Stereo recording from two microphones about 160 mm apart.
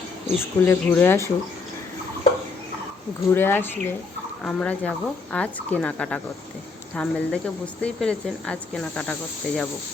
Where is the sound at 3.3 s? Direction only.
15° left (ahead or behind).